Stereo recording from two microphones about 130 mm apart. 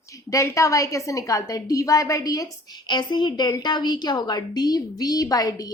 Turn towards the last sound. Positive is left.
turn(degrees=30)  # may be behind; listen again after turning